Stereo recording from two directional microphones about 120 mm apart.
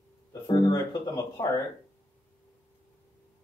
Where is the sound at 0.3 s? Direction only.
35° left (ahead or behind).